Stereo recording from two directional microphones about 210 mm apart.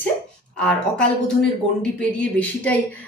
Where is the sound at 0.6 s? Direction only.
5° left (ahead or behind).